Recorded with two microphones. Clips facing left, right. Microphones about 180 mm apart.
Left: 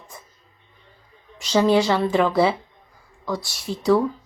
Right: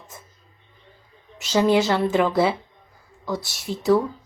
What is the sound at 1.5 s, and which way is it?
A woman's voice, 5° right (ahead or behind).